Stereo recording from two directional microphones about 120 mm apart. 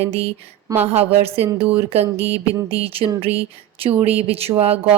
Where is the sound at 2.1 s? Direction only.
15° right (ahead or behind).